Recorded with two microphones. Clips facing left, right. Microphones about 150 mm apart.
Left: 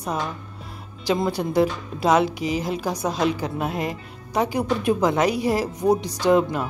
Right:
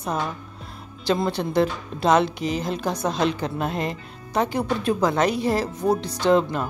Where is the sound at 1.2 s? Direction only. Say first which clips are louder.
Left 3 dB; 10° left (ahead or behind).